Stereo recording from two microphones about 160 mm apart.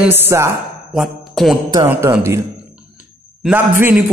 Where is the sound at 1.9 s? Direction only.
15° right (ahead or behind).